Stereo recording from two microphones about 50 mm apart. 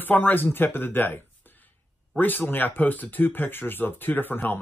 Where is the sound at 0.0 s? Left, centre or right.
Left.